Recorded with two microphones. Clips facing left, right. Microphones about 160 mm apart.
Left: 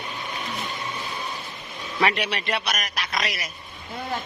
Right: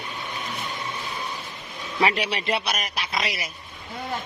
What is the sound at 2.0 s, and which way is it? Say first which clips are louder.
A man's voice: right 1 dB; 30° right (ahead or behind).